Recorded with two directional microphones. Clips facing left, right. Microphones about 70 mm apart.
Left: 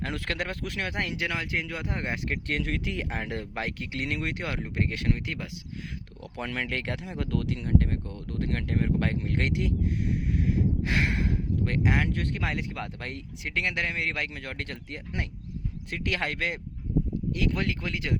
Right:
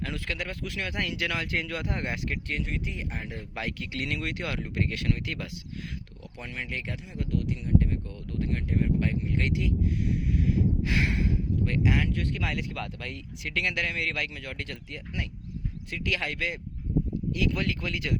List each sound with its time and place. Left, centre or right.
0.0 s speech: left
2.5 s speech: left
3.5 s speech: left
3.9 s speech: left
6.3 s speech: left
12.4 s a man's voice: left
14.3 s a man's voice: left